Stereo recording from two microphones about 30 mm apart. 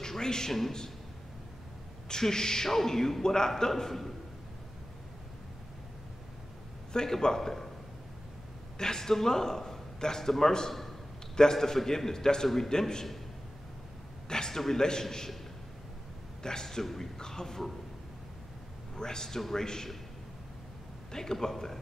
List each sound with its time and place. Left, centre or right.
0.0 s a sound: centre
0.5 s a man's voice: centre
2.0 s a man's voice: left
6.9 s a man's voice: left
7.3 s a man's voice: centre
8.7 s a man's voice: centre
14.3 s a man's voice: left
16.4 s a man's voice: left
16.8 s a man's voice: centre
17.2 s a man's voice: centre
18.9 s a man's voice: left
21.1 s a man's voice: centre